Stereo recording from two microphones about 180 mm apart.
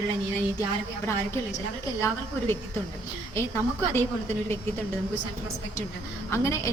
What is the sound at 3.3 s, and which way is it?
Speech, 15° left (ahead or behind).